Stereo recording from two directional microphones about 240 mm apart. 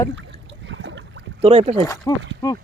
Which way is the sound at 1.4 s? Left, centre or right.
Right.